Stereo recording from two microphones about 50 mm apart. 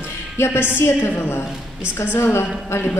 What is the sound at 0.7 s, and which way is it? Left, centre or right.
Speech, left.